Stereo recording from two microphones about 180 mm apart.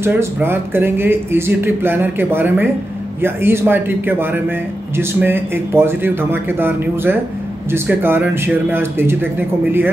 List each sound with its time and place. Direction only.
0.0 s speech: 15° right (ahead or behind)